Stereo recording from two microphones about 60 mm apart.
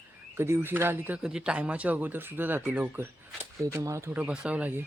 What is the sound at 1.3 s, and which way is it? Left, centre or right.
Speech, centre.